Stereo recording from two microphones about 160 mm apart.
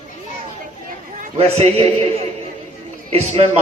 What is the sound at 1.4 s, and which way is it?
A man's voice, 40° right (ahead or behind).